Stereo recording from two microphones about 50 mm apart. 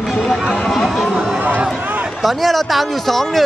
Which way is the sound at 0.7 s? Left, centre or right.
Centre.